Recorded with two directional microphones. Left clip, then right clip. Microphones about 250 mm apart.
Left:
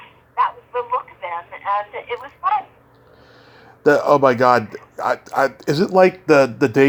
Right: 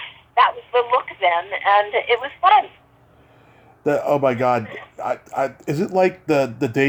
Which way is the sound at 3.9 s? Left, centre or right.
Centre.